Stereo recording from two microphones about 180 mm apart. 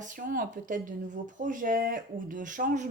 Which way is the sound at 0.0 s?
50° right (ahead or behind).